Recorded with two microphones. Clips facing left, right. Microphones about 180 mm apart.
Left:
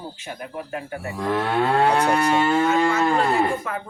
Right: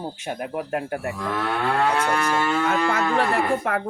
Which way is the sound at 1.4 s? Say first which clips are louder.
Left 3 dB; 30° left (ahead or behind).